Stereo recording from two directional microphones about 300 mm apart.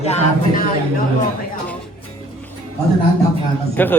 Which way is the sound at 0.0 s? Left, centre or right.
Left.